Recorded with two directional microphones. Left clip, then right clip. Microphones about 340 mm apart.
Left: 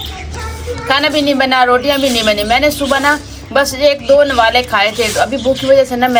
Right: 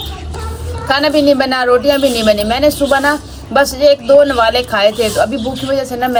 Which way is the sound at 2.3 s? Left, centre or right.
Centre.